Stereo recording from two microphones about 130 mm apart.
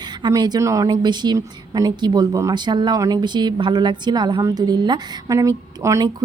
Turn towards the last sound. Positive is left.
turn(degrees=-25)  # may be behind; listen again after turning